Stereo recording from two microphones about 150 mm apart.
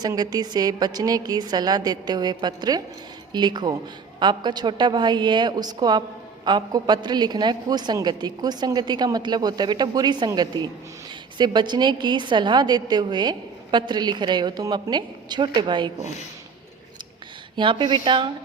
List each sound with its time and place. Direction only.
0.0 s a woman's voice: 25° right (ahead or behind)
17.6 s speech: 30° right (ahead or behind)